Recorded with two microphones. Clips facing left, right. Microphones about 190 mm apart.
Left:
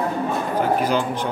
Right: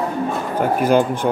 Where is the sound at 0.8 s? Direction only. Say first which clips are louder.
Right 6 dB; 50° right (ahead or behind).